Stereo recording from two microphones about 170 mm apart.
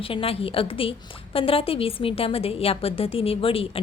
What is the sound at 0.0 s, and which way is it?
A woman's voice, 35° left (ahead or behind).